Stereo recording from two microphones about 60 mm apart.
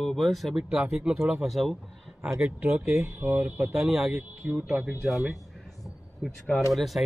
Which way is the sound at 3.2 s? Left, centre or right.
Right.